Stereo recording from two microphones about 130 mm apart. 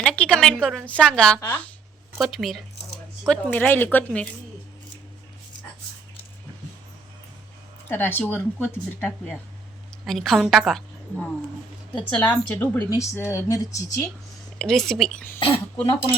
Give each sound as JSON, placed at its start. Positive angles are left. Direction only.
{"t": 0.0, "sound": "a woman's voice", "side_deg": 5}
{"t": 2.1, "sound": "a woman's voice", "side_deg": 0}
{"t": 3.2, "sound": "a woman's voice", "side_deg": 10}
{"t": 7.9, "sound": "a woman's voice", "side_deg": 15}
{"t": 10.1, "sound": "a woman's voice", "side_deg": 0}
{"t": 14.6, "sound": "a woman's voice", "side_deg": 5}
{"t": 15.4, "sound": "speech", "side_deg": 45}